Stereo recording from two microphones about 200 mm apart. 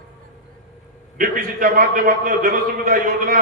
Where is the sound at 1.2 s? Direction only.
45° right (ahead or behind).